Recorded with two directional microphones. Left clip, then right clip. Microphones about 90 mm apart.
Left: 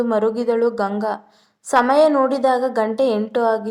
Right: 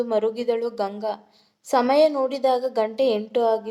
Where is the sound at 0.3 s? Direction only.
20° left (ahead or behind).